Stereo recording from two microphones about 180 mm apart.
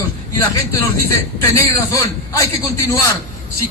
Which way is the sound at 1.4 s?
15° left (ahead or behind).